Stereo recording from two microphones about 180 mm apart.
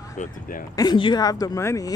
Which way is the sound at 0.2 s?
50° left (ahead or behind).